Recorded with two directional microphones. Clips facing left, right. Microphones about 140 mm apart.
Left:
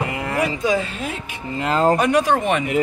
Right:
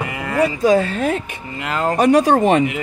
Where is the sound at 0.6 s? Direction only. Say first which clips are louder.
Right 6 dB; 45° right (ahead or behind).